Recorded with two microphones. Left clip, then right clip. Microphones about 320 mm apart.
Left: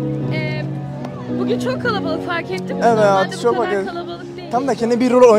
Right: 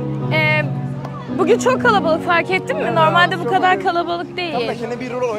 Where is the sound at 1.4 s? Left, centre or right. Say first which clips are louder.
Right 6 dB; right.